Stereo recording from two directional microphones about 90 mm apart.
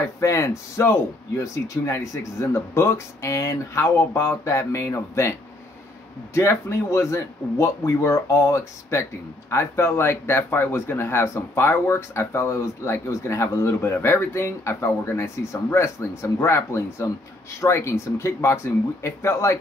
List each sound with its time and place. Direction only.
0.2 s speech: 35° left (ahead or behind)
6.3 s speech: 30° left (ahead or behind)